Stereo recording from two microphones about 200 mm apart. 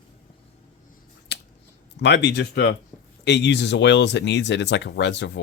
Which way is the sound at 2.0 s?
60° left (ahead or behind).